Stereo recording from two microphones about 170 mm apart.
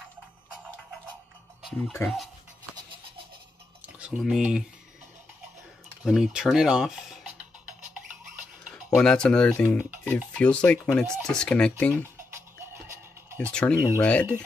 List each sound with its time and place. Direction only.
1.8 s speech: 15° left (ahead or behind)
3.8 s speech: 5° right (ahead or behind)
6.0 s speech: 5° right (ahead or behind)
8.9 s speech: 5° left (ahead or behind)
12.9 s music: 15° right (ahead or behind)
13.5 s speech: 5° left (ahead or behind)